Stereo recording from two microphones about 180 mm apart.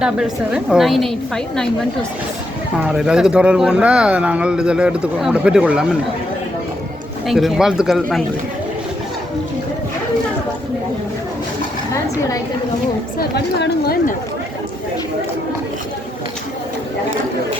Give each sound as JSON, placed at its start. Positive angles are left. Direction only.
{"t": 0.0, "sound": "speech", "side_deg": -5}
{"t": 2.7, "sound": "speech", "side_deg": -5}
{"t": 7.3, "sound": "speech", "side_deg": 0}
{"t": 13.1, "sound": "speech", "side_deg": 65}